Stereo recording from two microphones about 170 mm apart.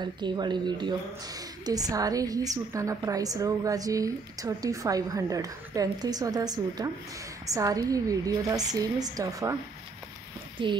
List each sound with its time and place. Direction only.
0.0 s speech: 25° right (ahead or behind)
10.6 s speech: 30° right (ahead or behind)